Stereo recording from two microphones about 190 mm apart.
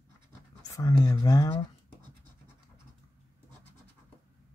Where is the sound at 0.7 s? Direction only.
15° left (ahead or behind).